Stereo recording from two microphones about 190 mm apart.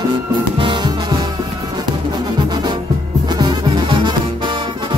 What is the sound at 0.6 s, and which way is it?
Music, 25° right (ahead or behind).